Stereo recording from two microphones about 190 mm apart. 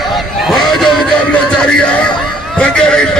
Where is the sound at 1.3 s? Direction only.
5° left (ahead or behind).